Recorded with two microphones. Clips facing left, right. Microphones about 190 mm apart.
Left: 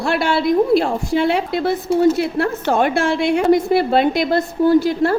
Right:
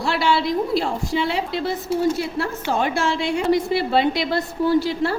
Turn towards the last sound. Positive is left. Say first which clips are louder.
# left 5 dB
turn(degrees=50)  # may be behind; listen again after turning